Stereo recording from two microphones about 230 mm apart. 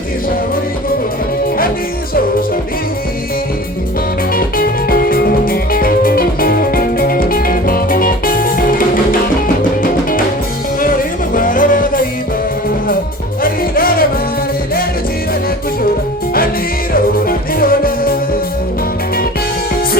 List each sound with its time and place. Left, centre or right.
4.4 s music: left
9.8 s music: left
13.4 s music: left
16.9 s music: left